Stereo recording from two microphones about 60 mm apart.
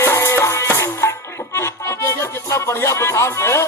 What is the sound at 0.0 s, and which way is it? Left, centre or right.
Music, left.